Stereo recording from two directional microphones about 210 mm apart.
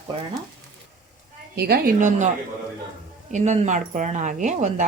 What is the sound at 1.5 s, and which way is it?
Speech, 50° right (ahead or behind).